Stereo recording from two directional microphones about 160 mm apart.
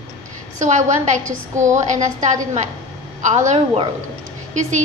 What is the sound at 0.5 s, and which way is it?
Speech, 50° right (ahead or behind).